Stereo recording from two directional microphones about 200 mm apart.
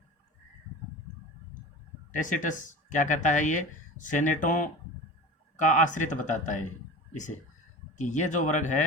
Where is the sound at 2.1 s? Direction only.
40° left (ahead or behind).